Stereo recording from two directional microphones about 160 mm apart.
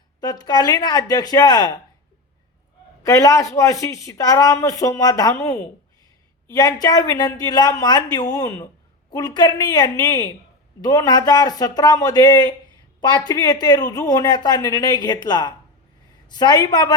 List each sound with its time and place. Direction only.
0.2 s speech: 25° left (ahead or behind)
3.0 s a woman's voice: 20° left (ahead or behind)